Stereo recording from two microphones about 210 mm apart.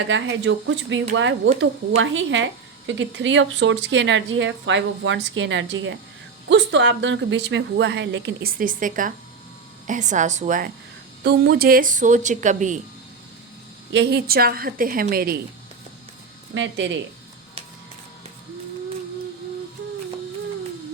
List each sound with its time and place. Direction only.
0.1 s speech: 60° right (ahead or behind); by 10.7 s 35° right (ahead or behind)
11.2 s speech: 50° right (ahead or behind); by 12.8 s 35° right (ahead or behind)
13.9 s a woman's voice: 50° right (ahead or behind)
16.6 s speech: 60° right (ahead or behind)